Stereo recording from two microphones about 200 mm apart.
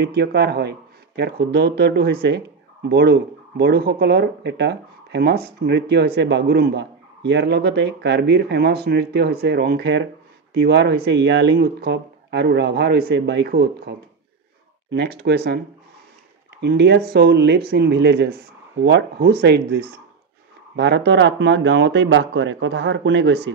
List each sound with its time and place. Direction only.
0.0 s speech: 55° right (ahead or behind)
16.6 s speech: 60° right (ahead or behind)